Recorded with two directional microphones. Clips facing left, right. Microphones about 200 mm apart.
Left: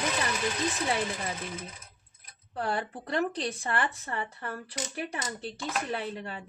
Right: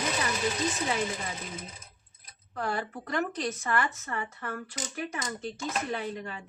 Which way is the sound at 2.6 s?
30° left (ahead or behind).